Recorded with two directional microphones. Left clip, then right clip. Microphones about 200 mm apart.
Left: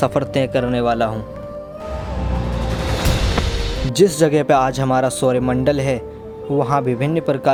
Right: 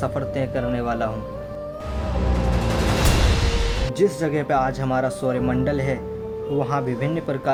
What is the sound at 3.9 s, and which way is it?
Speech, 50° left (ahead or behind).